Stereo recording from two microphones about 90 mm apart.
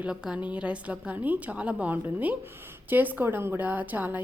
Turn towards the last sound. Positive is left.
turn(degrees=-20)  # may be behind; listen again after turning